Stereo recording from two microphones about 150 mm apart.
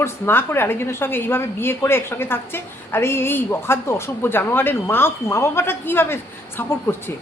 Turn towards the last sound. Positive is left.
turn(degrees=15)  # may be behind; listen again after turning